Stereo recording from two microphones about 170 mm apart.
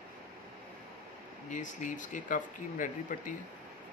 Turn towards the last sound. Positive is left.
turn(degrees=50)  # may be behind; listen again after turning